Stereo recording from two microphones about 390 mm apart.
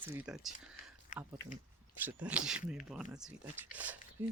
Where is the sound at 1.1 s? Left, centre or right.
Centre.